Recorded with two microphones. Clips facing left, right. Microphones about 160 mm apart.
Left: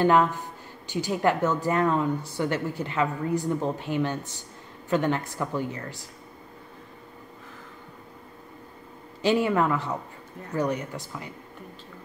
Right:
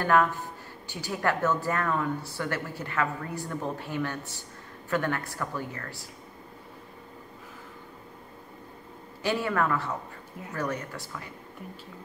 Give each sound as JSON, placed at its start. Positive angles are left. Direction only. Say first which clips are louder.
{"t": 0.0, "sound": "a woman's voice", "louder": "left 3 dB", "side_deg": 20}
{"t": 9.2, "sound": "a woman's voice", "louder": "left 5 dB", "side_deg": 20}